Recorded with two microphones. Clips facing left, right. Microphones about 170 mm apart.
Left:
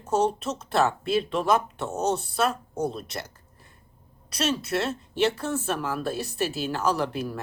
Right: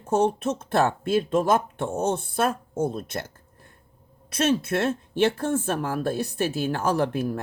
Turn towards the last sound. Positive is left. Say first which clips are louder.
# right 4 dB
turn(degrees=-50)  # may be behind; listen again after turning